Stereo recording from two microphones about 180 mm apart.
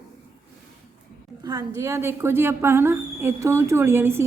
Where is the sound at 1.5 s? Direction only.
15° right (ahead or behind).